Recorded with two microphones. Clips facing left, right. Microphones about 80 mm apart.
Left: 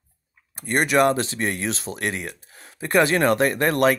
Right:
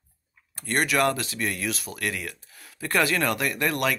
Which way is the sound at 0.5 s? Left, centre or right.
Left.